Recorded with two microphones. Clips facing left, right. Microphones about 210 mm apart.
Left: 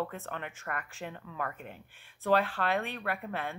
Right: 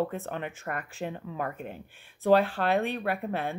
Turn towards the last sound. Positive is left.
turn(degrees=-35)  # may be behind; listen again after turning